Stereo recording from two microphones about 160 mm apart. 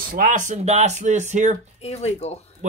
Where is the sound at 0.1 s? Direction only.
55° right (ahead or behind).